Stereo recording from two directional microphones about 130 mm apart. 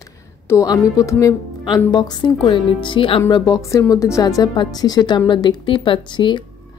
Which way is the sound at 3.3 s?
25° left (ahead or behind).